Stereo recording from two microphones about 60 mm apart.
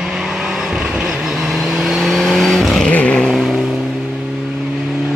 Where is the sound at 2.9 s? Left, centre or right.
Left.